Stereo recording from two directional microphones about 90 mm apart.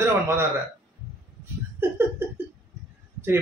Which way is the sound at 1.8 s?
25° right (ahead or behind).